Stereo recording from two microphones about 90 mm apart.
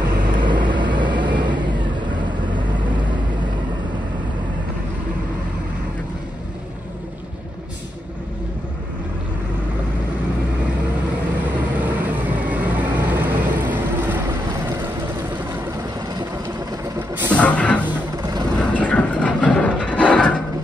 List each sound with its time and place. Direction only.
0.3 s vehicle: 60° right (ahead or behind)
11.8 s vehicle: 20° right (ahead or behind)
17.3 s music: 15° left (ahead or behind)
18.1 s vehicle: 45° right (ahead or behind)
18.6 s mechanisms: 15° left (ahead or behind)